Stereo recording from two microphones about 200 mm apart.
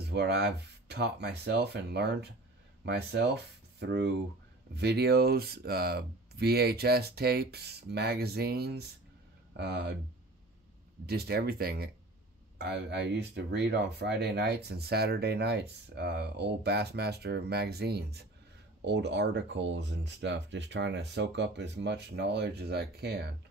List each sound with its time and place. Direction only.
0.0 s speech: 55° right (ahead or behind)
11.1 s speech: 50° right (ahead or behind)